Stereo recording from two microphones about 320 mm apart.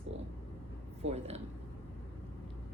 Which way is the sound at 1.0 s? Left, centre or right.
Centre.